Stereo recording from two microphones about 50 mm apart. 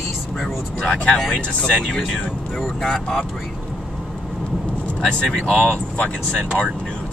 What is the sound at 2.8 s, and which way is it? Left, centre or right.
Speech, centre.